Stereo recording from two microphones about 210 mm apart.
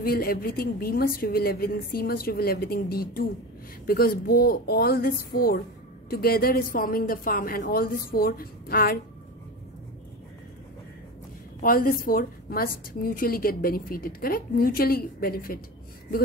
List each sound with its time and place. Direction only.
0.0 s a woman's voice: 45° left (ahead or behind)
11.6 s a woman's voice: 40° left (ahead or behind)